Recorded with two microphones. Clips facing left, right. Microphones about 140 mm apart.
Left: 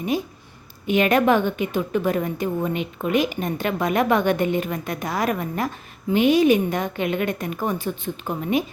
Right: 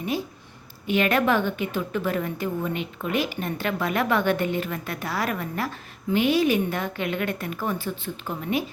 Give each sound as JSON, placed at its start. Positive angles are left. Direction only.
{"t": 0.9, "sound": "a woman's voice", "side_deg": 15}